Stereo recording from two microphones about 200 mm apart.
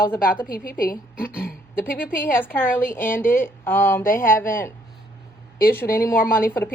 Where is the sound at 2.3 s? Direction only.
10° left (ahead or behind).